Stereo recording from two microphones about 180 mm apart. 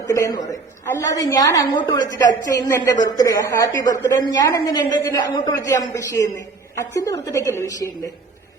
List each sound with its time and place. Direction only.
0.0 s a woman's voice: 20° left (ahead or behind)